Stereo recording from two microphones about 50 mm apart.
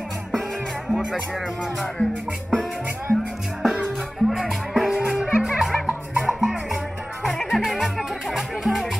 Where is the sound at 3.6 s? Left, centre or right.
Centre.